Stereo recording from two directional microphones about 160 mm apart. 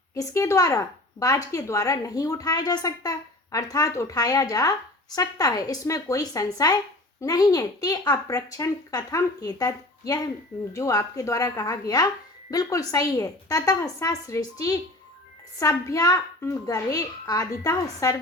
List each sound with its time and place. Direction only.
0.1 s speech: 20° left (ahead or behind)